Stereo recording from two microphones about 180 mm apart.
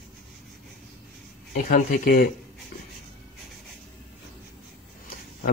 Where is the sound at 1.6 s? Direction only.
55° left (ahead or behind).